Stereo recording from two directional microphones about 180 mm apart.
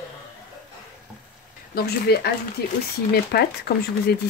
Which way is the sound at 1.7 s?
60° left (ahead or behind).